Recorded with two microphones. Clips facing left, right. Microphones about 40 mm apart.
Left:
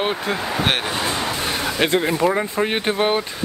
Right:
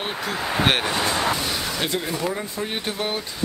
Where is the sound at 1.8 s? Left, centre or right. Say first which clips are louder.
Left 10 dB; left.